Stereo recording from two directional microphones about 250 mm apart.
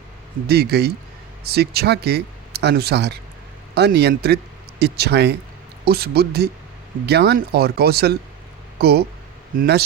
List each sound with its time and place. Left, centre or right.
0.4 s speech: right